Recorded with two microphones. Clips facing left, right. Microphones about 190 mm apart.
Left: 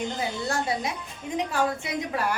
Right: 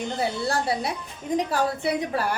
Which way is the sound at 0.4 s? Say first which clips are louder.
Right 2 dB; 35° right (ahead or behind).